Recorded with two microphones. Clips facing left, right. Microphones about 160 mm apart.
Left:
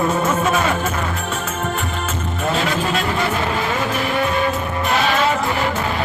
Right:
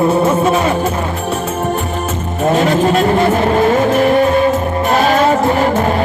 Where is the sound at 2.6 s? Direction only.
40° right (ahead or behind).